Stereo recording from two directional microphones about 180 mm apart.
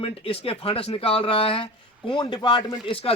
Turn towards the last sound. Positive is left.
turn(degrees=30)  # may be behind; listen again after turning